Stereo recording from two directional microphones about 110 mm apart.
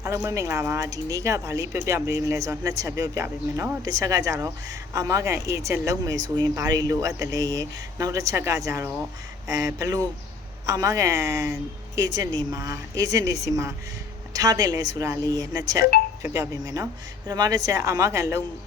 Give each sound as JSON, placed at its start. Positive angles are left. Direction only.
{"t": 0.0, "sound": "speech", "side_deg": -30}
{"t": 3.8, "sound": "speech", "side_deg": -35}